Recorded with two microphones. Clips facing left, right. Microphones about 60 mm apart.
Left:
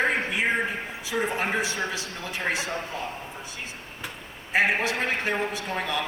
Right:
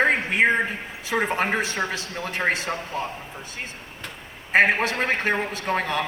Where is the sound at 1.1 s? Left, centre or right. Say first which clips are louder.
Right 3 dB; right.